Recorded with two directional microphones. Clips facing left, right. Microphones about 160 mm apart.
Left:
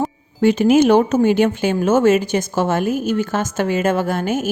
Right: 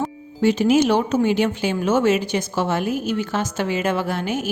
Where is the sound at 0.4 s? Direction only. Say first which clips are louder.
Left 4 dB; 55° left (ahead or behind).